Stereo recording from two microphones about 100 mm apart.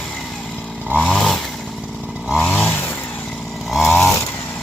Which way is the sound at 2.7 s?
20° left (ahead or behind).